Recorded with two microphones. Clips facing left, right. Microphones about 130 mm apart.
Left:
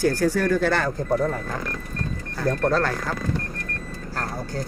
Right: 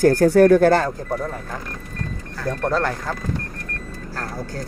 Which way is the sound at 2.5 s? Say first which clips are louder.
Even; 10° right (ahead or behind).